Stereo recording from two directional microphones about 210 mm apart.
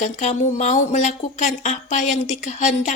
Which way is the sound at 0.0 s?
35° left (ahead or behind).